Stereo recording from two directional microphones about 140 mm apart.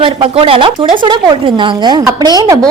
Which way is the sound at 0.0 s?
40° right (ahead or behind).